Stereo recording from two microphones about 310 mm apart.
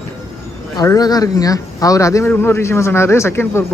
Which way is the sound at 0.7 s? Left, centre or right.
Centre.